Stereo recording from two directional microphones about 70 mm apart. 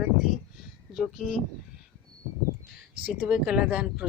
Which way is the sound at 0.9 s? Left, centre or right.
Centre.